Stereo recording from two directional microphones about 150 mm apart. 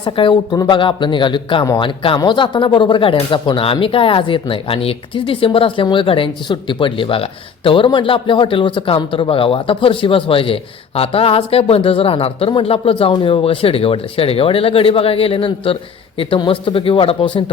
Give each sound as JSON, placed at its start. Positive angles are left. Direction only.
{"t": 0.0, "sound": "a man's voice", "side_deg": 35}